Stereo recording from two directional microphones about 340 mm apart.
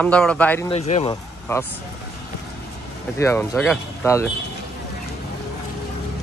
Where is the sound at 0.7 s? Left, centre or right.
Centre.